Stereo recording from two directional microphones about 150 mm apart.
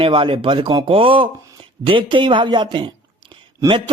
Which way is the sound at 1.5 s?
35° right (ahead or behind).